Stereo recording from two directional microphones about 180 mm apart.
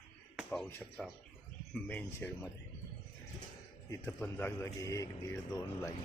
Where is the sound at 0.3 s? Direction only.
Centre (ahead or behind).